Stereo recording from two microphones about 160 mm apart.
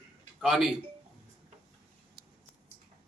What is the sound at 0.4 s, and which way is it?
Speech, centre (ahead or behind).